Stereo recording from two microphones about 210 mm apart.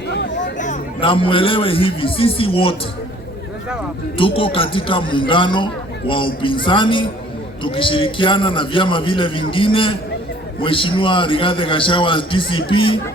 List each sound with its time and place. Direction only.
0.1 s a sound: 55° left (ahead or behind)
0.5 s speech: 35° left (ahead or behind)
4.2 s speech: 25° left (ahead or behind)